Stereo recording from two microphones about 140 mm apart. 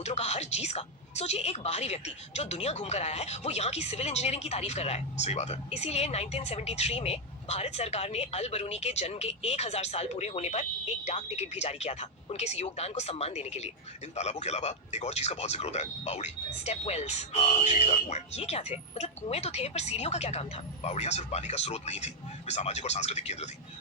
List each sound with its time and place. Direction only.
0.0 s speech: 50° left (ahead or behind)